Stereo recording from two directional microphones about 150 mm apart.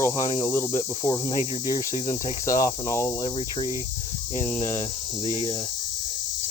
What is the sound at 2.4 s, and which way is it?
Cricket, 20° left (ahead or behind).